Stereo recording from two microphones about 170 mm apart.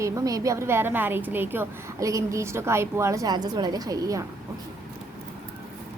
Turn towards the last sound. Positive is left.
turn(degrees=-20)  # may be behind; listen again after turning